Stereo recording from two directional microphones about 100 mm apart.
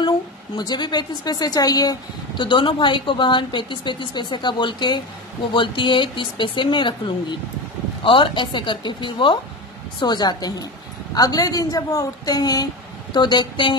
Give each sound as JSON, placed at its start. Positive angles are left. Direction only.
{"t": 0.6, "sound": "a woman's voice", "side_deg": 45}